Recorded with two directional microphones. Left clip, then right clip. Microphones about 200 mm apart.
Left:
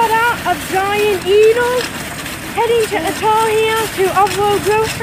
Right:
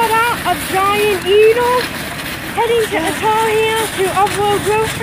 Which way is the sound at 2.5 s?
20° left (ahead or behind).